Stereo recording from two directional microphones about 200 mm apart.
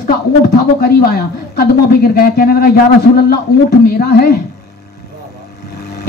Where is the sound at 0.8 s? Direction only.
50° left (ahead or behind).